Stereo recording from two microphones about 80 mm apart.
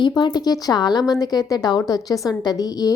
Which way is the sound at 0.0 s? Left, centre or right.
Left.